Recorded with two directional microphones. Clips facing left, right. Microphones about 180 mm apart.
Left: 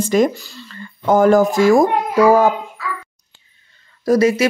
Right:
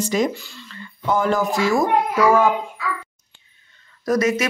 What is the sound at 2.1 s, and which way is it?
Speech, 35° left (ahead or behind).